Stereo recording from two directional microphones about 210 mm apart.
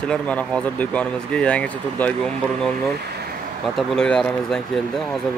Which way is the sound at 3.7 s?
5° left (ahead or behind).